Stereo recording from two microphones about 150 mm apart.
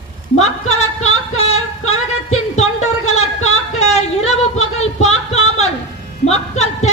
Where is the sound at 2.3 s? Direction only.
45° left (ahead or behind).